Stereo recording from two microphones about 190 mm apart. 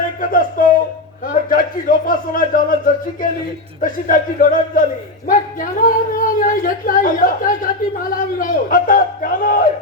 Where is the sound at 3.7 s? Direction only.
45° left (ahead or behind).